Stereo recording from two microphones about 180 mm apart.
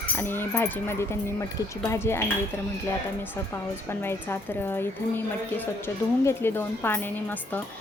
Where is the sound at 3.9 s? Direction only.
15° left (ahead or behind).